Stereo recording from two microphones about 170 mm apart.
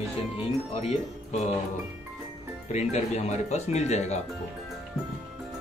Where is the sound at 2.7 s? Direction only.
40° left (ahead or behind).